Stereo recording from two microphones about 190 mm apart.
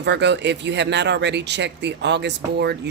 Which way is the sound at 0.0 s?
65° right (ahead or behind).